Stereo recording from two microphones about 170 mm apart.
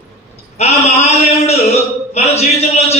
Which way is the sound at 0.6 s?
40° left (ahead or behind).